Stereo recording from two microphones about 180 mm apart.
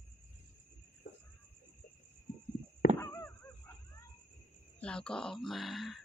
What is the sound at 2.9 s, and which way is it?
Honk, 15° left (ahead or behind).